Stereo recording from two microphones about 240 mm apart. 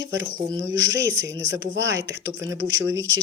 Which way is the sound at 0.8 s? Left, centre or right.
Right.